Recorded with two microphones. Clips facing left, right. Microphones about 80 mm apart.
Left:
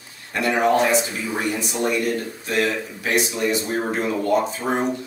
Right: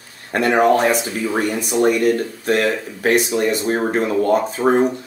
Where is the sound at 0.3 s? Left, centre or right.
Right.